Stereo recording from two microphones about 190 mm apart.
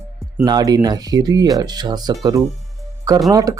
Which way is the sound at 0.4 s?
20° right (ahead or behind).